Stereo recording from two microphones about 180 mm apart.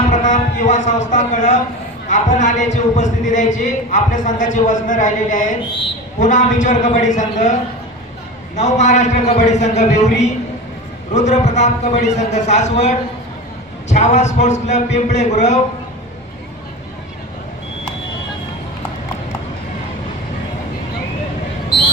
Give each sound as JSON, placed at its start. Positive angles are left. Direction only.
{"t": 0.1, "sound": "a sound", "side_deg": 45}
{"t": 2.0, "sound": "a man's voice", "side_deg": 45}
{"t": 8.5, "sound": "a man's voice", "side_deg": 40}